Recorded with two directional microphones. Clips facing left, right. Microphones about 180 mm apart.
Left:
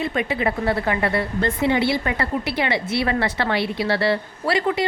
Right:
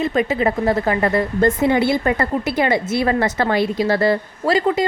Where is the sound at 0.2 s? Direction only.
40° right (ahead or behind).